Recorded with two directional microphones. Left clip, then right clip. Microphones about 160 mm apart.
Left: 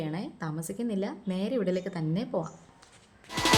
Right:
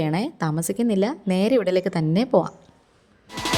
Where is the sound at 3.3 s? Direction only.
Centre (ahead or behind).